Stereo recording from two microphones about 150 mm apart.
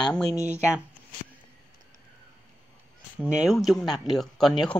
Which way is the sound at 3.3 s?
5° right (ahead or behind).